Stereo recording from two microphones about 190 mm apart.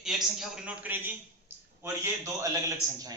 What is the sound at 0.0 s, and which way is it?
A man's voice, centre (ahead or behind).